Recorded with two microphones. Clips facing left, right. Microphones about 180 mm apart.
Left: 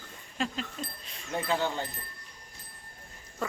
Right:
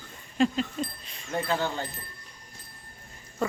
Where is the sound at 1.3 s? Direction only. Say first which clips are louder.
Right 1 dB; 15° left (ahead or behind).